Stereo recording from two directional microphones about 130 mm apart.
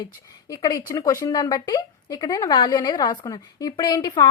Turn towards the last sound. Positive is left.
turn(degrees=35)  # may be behind; listen again after turning